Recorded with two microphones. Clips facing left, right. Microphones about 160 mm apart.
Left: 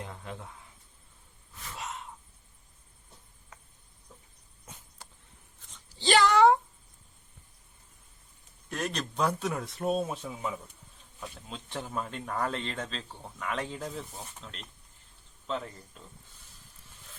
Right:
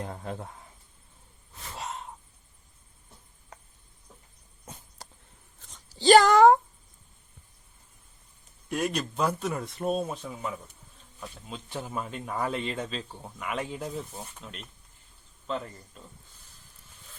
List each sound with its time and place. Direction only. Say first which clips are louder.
0.0 s speech: right 5 dB; 40° right (ahead or behind)
1.7 s gasp: right 3 dB; 35° right (ahead or behind)
5.7 s speech: right 8 dB; 40° right (ahead or behind)
8.7 s speech: right 4 dB; 10° right (ahead or behind)